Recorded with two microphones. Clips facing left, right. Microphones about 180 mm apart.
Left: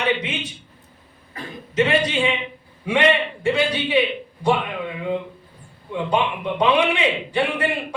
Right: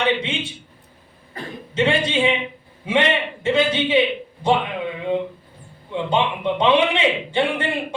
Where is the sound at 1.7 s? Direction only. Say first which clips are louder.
Even; 30° right (ahead or behind).